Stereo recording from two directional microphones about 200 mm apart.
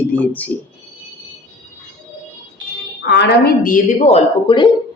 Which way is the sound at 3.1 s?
60° left (ahead or behind).